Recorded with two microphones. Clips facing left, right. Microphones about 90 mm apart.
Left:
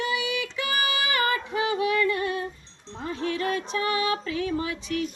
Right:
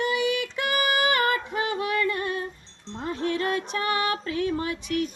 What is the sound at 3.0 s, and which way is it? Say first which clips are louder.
Music: right 1 dB; 55° right (ahead or behind).